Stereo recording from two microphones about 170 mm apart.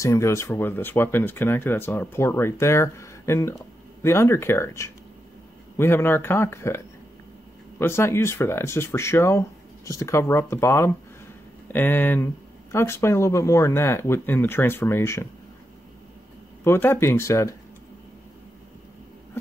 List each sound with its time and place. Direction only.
0.0 s speech: 15° left (ahead or behind)
7.8 s speech: 15° left (ahead or behind)
16.6 s speech: 15° left (ahead or behind)